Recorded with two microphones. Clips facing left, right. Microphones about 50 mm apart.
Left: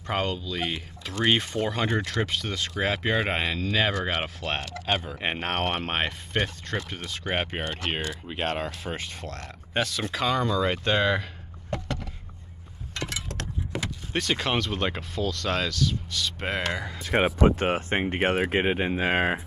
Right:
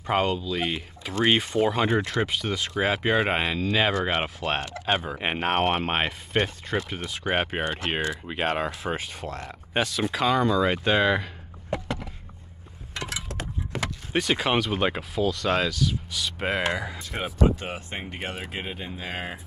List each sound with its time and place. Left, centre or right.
0.0 s speech: centre
11.7 s a sound: centre
13.7 s vehicle: centre
14.1 s speech: centre
17.0 s speech: left